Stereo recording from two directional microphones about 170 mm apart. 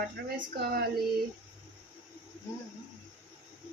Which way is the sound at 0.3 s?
70° right (ahead or behind).